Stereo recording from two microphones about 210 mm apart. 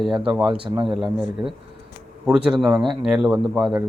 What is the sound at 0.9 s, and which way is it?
Speech, centre (ahead or behind).